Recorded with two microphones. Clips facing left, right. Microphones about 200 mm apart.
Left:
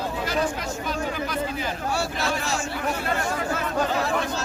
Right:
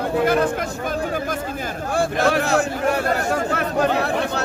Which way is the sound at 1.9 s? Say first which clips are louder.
Right 11 dB; 50° right (ahead or behind).